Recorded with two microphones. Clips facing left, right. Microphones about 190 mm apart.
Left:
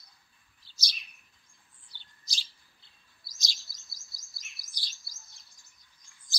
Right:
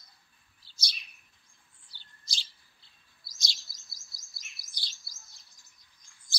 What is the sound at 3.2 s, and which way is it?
Chirp, centre (ahead or behind).